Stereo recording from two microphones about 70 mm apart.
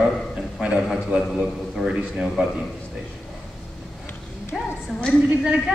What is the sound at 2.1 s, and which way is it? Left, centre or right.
Speech, centre.